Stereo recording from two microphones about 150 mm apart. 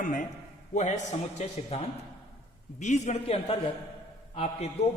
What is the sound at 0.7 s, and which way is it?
Speech, 50° left (ahead or behind).